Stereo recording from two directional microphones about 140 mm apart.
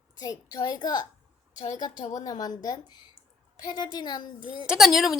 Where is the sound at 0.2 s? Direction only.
30° left (ahead or behind).